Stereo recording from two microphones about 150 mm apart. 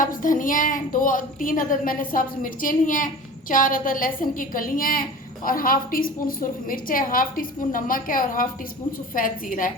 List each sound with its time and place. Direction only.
0.0 s a woman's voice: 60° left (ahead or behind)